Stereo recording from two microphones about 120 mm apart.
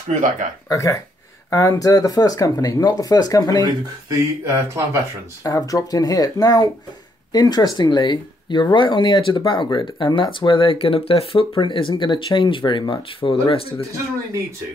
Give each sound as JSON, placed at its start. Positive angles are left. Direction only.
{"t": 0.1, "sound": "speech", "side_deg": -90}
{"t": 0.7, "sound": "speech", "side_deg": 25}
{"t": 3.6, "sound": "speech", "side_deg": -30}
{"t": 5.4, "sound": "speech", "side_deg": 30}